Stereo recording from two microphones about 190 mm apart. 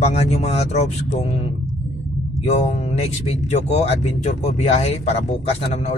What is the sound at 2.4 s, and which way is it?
Speech, 35° left (ahead or behind).